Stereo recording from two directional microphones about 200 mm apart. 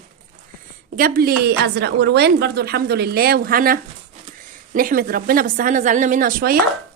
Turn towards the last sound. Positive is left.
turn(degrees=-45)  # may be behind; listen again after turning